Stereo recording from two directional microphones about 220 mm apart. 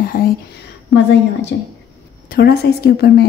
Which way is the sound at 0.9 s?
50° left (ahead or behind).